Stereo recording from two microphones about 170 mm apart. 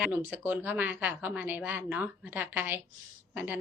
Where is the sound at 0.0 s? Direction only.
10° right (ahead or behind).